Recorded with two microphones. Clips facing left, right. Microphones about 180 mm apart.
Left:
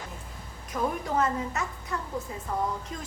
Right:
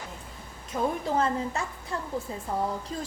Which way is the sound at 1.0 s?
30° right (ahead or behind).